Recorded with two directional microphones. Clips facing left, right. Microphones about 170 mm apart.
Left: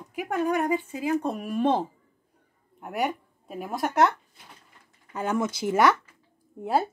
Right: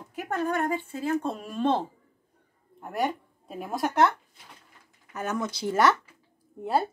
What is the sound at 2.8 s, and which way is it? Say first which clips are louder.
Speech: even; 10° left (ahead or behind).